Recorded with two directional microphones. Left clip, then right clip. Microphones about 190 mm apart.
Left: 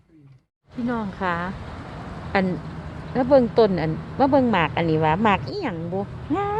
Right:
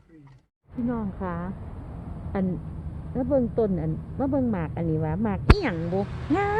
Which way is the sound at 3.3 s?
30° left (ahead or behind).